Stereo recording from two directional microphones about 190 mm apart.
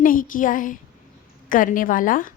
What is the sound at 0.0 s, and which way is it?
A woman's voice, 45° left (ahead or behind).